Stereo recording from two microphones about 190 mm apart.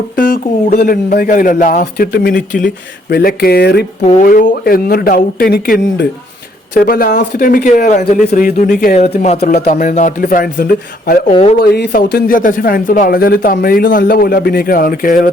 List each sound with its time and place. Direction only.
0.2 s speech: 45° left (ahead or behind)
1.8 s speech: 55° left (ahead or behind)
4.0 s speech: 45° left (ahead or behind)